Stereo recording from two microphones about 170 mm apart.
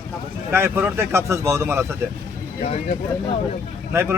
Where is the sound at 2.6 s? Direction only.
45° left (ahead or behind).